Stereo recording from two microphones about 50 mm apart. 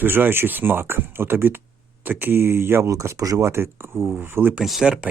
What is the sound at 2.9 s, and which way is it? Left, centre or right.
Speech, right.